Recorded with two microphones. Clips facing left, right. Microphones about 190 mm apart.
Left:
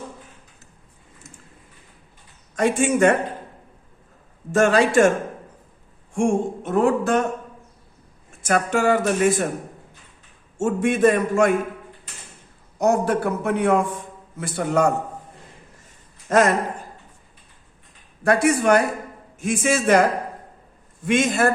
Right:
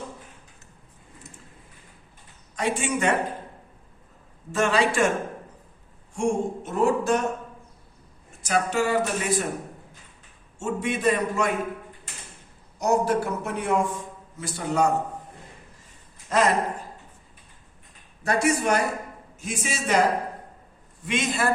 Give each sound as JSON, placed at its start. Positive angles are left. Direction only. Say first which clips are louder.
{"t": 2.6, "sound": "speech", "louder": "left 8 dB", "side_deg": 50}
{"t": 4.5, "sound": "speech", "louder": "left 6 dB", "side_deg": 45}
{"t": 6.1, "sound": "a man's voice", "louder": "left 4 dB", "side_deg": 55}
{"t": 8.4, "sound": "speech", "louder": "left 3 dB", "side_deg": 50}
{"t": 10.6, "sound": "speech", "louder": "left 7 dB", "side_deg": 50}
{"t": 12.8, "sound": "a man's voice", "louder": "left 3 dB", "side_deg": 55}
{"t": 16.3, "sound": "speech", "louder": "left 5 dB", "side_deg": 45}
{"t": 18.2, "sound": "a man's voice", "louder": "left 5 dB", "side_deg": 55}
{"t": 21.1, "sound": "speech", "louder": "left 7 dB", "side_deg": 50}